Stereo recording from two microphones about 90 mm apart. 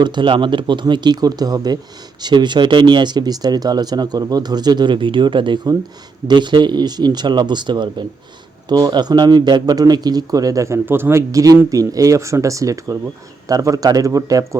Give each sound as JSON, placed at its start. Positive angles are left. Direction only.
{"t": 0.0, "sound": "speech", "side_deg": -60}
{"t": 10.8, "sound": "speech", "side_deg": -25}